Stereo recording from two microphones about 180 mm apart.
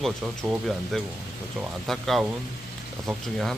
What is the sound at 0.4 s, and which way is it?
Speech, 20° right (ahead or behind).